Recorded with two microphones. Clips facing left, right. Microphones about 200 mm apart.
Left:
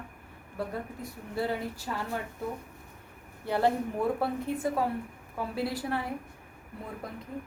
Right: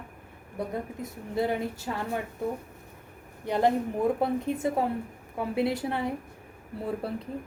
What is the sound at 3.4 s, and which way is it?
A woman's voice, 15° right (ahead or behind).